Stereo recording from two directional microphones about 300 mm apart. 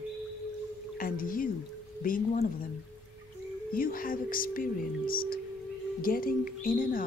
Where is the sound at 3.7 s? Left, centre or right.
Left.